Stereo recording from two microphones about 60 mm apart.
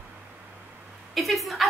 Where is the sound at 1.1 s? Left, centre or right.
Centre.